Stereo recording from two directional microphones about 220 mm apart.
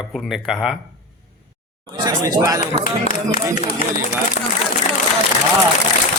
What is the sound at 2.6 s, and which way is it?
Speech, 35° left (ahead or behind).